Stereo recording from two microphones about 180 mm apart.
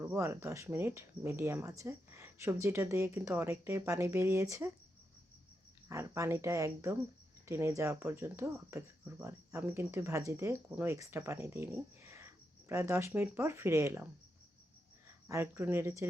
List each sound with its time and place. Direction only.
0.0 s speech: 15° right (ahead or behind)
5.9 s speech: 15° right (ahead or behind)
15.3 s speech: 15° right (ahead or behind)